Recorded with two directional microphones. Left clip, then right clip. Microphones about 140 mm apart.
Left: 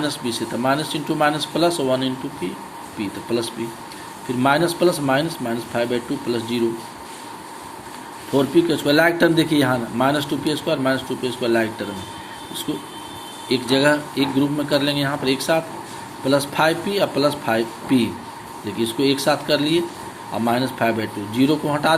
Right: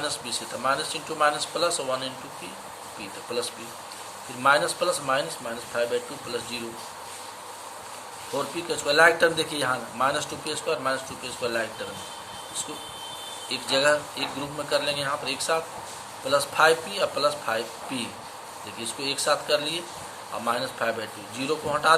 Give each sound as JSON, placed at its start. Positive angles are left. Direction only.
{"t": 0.0, "sound": "speech", "side_deg": 15}
{"t": 8.4, "sound": "speech", "side_deg": 15}
{"t": 13.5, "sound": "speech", "side_deg": 15}